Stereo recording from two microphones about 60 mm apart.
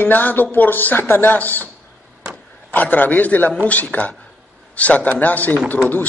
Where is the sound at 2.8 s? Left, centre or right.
Left.